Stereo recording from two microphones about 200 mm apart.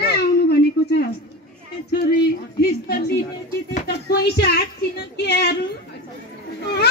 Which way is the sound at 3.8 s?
55° left (ahead or behind).